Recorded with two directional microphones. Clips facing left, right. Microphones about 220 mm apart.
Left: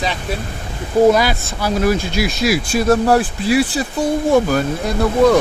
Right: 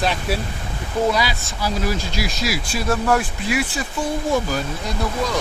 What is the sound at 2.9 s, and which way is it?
Speech, 35° left (ahead or behind).